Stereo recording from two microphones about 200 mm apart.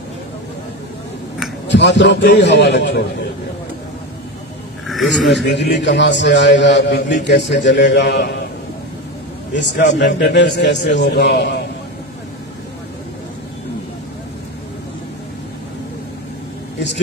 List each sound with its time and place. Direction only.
1.7 s a man's voice: 60° left (ahead or behind)
4.8 s speech: centre (ahead or behind)
5.3 s a man's voice: 60° left (ahead or behind)
9.6 s a man's voice: 60° left (ahead or behind)